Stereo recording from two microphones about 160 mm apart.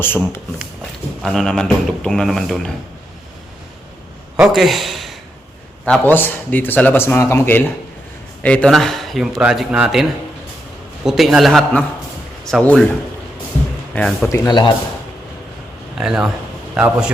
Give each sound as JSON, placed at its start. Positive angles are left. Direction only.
{"t": 0.0, "sound": "a man's voice", "side_deg": 15}
{"t": 4.4, "sound": "speech", "side_deg": 0}
{"t": 5.8, "sound": "a man's voice", "side_deg": 10}
{"t": 13.9, "sound": "a man's voice", "side_deg": 5}
{"t": 14.3, "sound": "speech", "side_deg": 20}
{"t": 16.0, "sound": "a man's voice", "side_deg": -5}